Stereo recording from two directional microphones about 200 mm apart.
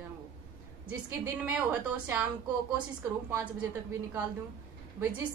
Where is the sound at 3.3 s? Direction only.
15° right (ahead or behind).